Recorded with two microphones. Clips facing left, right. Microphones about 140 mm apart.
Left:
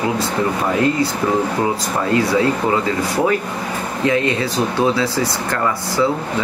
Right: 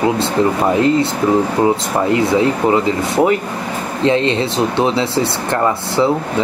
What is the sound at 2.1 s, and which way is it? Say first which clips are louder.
Speech: right 1 dB; 20° right (ahead or behind).